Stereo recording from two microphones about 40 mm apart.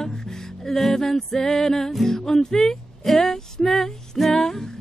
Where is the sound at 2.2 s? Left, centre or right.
Centre.